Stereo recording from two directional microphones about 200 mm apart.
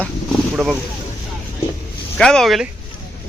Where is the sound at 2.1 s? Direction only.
5° left (ahead or behind).